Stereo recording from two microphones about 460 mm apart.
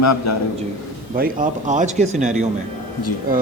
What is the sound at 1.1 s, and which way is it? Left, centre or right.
Speech, centre.